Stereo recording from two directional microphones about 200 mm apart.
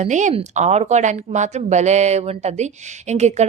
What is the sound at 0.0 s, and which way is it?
Speech, 35° right (ahead or behind).